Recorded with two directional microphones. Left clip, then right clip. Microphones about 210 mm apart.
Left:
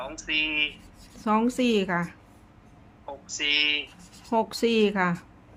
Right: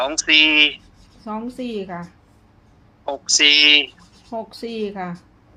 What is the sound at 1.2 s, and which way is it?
Speech, 30° left (ahead or behind).